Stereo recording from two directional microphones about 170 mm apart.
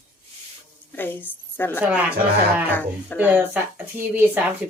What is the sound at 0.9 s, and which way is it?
Speech, 10° left (ahead or behind).